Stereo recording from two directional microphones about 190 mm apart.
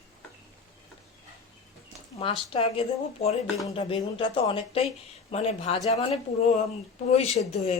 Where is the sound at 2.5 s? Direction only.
30° left (ahead or behind).